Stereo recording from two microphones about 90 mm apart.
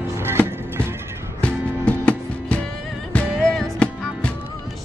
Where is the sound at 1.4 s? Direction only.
15° left (ahead or behind).